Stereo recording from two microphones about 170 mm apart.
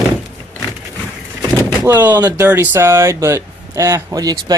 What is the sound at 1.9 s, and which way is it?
Speech, 10° right (ahead or behind).